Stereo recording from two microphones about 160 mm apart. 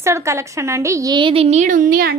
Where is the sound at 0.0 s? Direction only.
15° right (ahead or behind).